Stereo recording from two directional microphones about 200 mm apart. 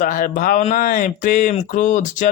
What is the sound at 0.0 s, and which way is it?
Speech, 40° left (ahead or behind).